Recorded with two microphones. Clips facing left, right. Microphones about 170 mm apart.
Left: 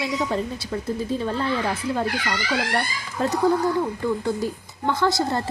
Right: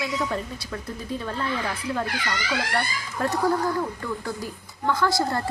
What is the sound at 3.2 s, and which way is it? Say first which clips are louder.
Speech: left 2 dB; 25° left (ahead or behind).